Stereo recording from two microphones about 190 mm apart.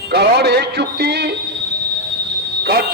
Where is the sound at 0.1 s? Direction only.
60° right (ahead or behind).